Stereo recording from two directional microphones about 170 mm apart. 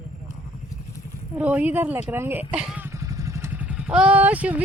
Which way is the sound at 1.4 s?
10° right (ahead or behind).